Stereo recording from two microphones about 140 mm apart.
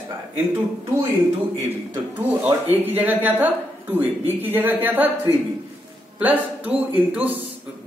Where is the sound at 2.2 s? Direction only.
15° right (ahead or behind).